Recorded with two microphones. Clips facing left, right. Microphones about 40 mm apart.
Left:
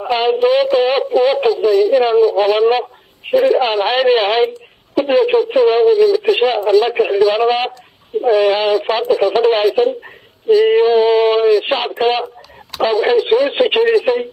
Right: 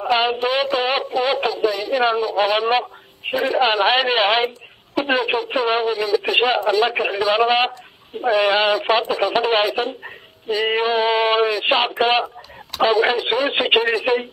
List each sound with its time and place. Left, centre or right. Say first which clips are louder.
0.0 s speech: left 5 dB; centre